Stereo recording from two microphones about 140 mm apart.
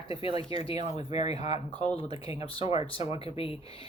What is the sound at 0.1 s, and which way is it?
Speech, 40° left (ahead or behind).